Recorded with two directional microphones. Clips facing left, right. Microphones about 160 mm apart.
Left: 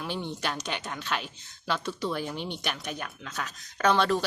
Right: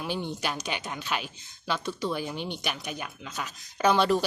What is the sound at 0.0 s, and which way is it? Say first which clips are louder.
Speech: right 1 dB; 5° right (ahead or behind).